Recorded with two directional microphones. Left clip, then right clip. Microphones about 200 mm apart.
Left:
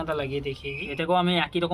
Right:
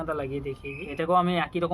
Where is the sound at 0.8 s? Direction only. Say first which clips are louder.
Right 1 dB; 20° right (ahead or behind).